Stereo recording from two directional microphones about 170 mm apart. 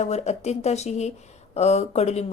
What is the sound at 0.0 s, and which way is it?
Speech, 40° left (ahead or behind).